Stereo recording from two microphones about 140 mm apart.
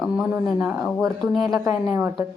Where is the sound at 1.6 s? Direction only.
20° right (ahead or behind).